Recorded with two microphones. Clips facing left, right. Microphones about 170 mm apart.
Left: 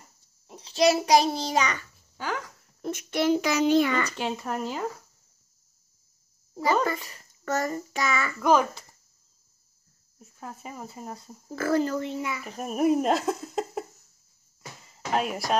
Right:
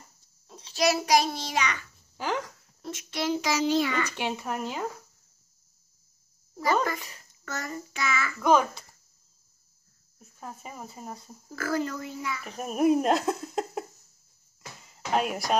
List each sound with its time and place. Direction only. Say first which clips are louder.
0.6 s a child's voice: left 4 dB; 30° left (ahead or behind)
2.1 s speech: right 2 dB; 20° right (ahead or behind)
2.8 s a child's voice: left 6 dB; 55° left (ahead or behind)
4.2 s speech: left 1 dB; 5° right (ahead or behind)
6.5 s a child's voice: left 2 dB; 30° left (ahead or behind)
8.4 s speech: even; centre (ahead or behind)
10.1 s speech: left 1 dB; centre (ahead or behind)
11.5 s speech: left 5 dB; 30° left (ahead or behind)
12.2 s speech: left 3 dB; 20° left (ahead or behind)
12.4 s speech: right 1 dB; centre (ahead or behind)
14.9 s a sound: even; centre (ahead or behind)